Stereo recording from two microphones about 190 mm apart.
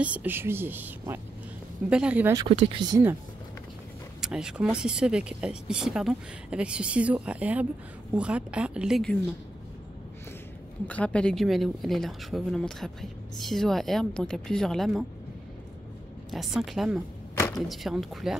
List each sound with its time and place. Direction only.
0.0 s speech: 10° right (ahead or behind)
2.3 s speech: 30° right (ahead or behind)
4.2 s speech: 5° right (ahead or behind)
10.9 s speech: 5° left (ahead or behind)
16.3 s speech: centre (ahead or behind)